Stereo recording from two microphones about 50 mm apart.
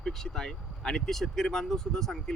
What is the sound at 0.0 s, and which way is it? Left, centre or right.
Speech, centre.